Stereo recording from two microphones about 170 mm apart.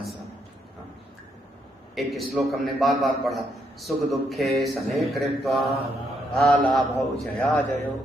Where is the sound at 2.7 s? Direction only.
Centre (ahead or behind).